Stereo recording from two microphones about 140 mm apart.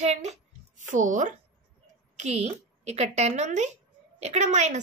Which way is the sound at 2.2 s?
50° right (ahead or behind).